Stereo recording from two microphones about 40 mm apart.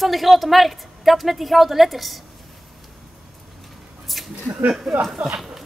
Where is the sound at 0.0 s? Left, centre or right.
Centre.